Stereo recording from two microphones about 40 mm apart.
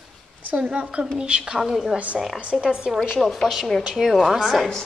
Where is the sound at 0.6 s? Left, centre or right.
Right.